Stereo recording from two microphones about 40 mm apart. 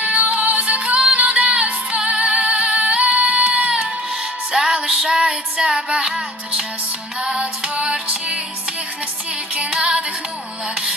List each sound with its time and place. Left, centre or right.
0.0 s music: right
3.2 s child singing: right
4.5 s music: right
7.2 s female singing: right
9.6 s music: right